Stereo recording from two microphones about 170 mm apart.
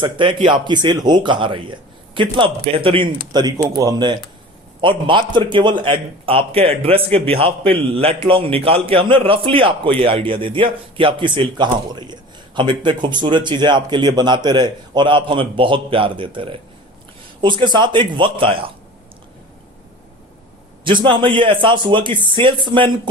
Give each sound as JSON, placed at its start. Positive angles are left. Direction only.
{"t": 0.0, "sound": "a man's voice", "side_deg": -30}
{"t": 20.8, "sound": "a man's voice", "side_deg": -30}